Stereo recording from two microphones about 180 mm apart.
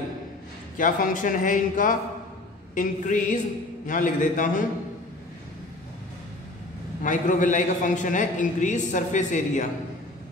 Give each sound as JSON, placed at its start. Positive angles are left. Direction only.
{"t": 0.7, "sound": "a man's voice", "side_deg": 50}
{"t": 7.0, "sound": "a man's voice", "side_deg": 45}